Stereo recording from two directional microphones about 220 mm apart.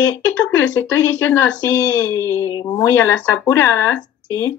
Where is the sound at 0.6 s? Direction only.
10° left (ahead or behind).